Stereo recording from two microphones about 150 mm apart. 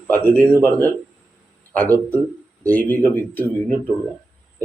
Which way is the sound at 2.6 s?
10° left (ahead or behind).